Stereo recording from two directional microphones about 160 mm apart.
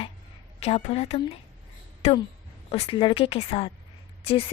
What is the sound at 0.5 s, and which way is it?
A woman's voice, 40° left (ahead or behind).